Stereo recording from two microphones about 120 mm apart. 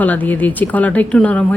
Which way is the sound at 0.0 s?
15° left (ahead or behind).